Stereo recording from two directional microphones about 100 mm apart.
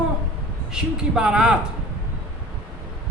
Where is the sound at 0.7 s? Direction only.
10° right (ahead or behind).